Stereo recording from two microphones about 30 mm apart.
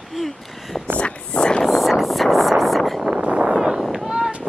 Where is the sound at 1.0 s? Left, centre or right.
Left.